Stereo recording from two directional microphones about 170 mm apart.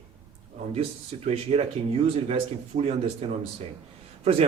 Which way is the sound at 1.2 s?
35° right (ahead or behind).